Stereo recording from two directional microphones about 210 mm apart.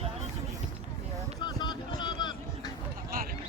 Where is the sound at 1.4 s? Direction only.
20° left (ahead or behind).